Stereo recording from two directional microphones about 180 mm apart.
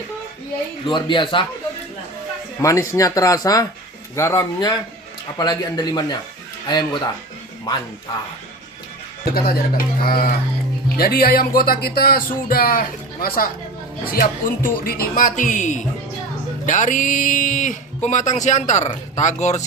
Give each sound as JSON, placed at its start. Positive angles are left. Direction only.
{"t": 0.9, "sound": "speech", "side_deg": 25}
{"t": 2.6, "sound": "speech", "side_deg": 15}
{"t": 9.3, "sound": "speech", "side_deg": 55}